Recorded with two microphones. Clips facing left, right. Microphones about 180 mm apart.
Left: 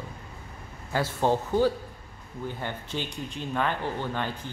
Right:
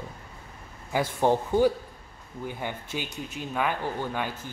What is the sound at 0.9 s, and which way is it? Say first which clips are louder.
A man's voice: right 1 dB; 15° right (ahead or behind).